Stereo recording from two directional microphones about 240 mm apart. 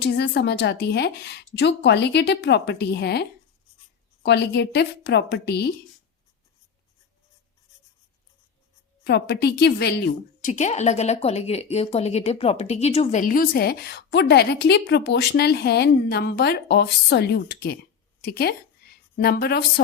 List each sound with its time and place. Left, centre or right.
0.0 s speech: left
9.0 s speech: left
10.4 s a woman's voice: left